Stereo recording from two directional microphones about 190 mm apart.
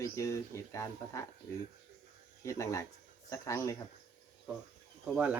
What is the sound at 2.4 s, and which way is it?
Speech, 15° left (ahead or behind).